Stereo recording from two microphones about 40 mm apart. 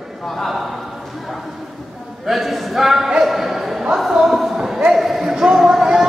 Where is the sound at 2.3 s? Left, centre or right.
Centre.